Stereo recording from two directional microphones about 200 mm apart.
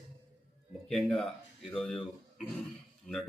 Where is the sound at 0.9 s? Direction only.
5° left (ahead or behind).